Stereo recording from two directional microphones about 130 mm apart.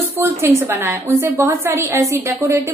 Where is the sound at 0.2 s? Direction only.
20° right (ahead or behind).